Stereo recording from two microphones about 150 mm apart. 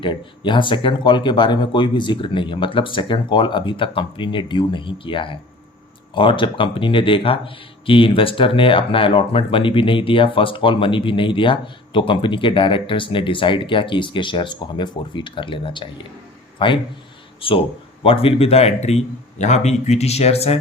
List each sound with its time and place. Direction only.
0.0 s a man's voice: 35° left (ahead or behind)